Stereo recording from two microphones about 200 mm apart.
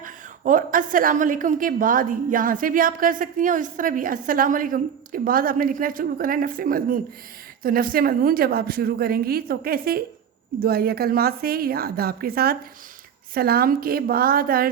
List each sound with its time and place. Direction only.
0.0 s a woman's voice: 40° right (ahead or behind)